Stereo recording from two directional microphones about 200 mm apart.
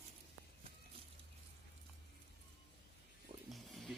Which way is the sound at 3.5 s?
Centre (ahead or behind).